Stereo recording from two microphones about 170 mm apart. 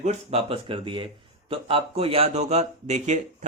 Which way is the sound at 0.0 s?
40° right (ahead or behind).